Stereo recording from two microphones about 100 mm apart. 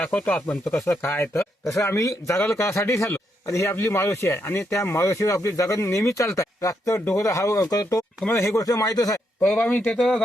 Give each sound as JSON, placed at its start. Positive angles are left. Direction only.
{"t": 0.0, "sound": "a man's voice", "side_deg": 10}
{"t": 9.4, "sound": "speech", "side_deg": 15}
{"t": 9.8, "sound": "speech", "side_deg": 0}